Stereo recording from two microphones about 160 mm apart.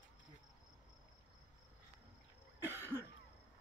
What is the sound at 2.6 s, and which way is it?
Cough, 15° right (ahead or behind).